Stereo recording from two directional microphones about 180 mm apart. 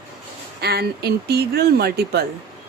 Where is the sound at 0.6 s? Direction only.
60° right (ahead or behind).